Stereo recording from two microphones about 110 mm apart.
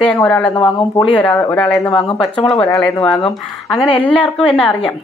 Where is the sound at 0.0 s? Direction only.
10° left (ahead or behind).